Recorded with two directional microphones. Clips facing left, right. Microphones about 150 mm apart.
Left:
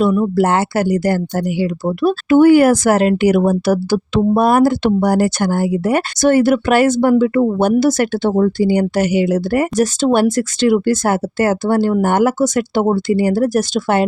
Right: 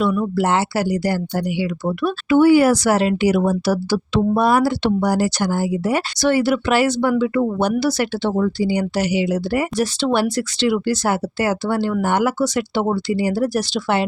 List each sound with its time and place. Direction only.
0.3 s speech: 50° left (ahead or behind)
2.4 s speech: 50° left (ahead or behind)